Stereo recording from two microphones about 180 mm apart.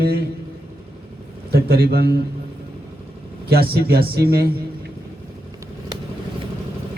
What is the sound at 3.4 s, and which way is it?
Speech, 60° right (ahead or behind).